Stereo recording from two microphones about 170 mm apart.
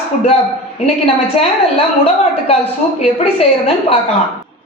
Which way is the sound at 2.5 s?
35° left (ahead or behind).